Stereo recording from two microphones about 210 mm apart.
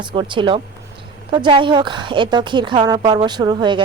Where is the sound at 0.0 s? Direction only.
20° right (ahead or behind).